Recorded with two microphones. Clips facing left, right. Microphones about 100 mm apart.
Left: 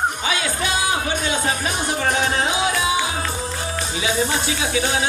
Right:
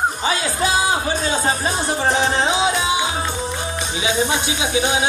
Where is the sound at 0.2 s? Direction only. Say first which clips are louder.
Right 2 dB; 35° right (ahead or behind).